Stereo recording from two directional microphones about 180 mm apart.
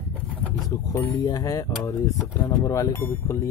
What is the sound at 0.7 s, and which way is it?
Speech, 20° left (ahead or behind).